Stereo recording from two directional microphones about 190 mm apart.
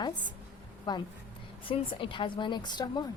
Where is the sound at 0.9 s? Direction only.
20° left (ahead or behind).